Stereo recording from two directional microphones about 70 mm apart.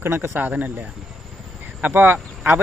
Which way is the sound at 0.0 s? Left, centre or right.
Right.